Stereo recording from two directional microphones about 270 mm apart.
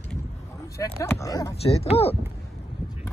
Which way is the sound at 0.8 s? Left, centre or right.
Centre.